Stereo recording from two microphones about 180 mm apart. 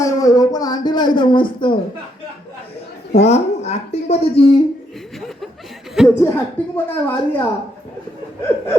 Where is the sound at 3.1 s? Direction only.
35° left (ahead or behind).